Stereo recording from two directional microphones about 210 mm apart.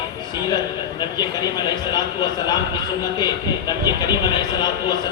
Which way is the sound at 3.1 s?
20° left (ahead or behind).